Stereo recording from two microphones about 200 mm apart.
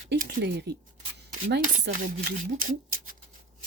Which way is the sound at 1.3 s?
40° right (ahead or behind).